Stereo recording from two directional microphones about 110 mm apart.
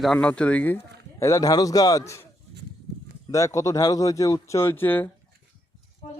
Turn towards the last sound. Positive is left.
turn(degrees=20)  # may be behind; listen again after turning